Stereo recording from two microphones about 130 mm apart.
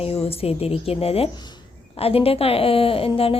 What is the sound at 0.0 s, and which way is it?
A woman's voice, 50° left (ahead or behind).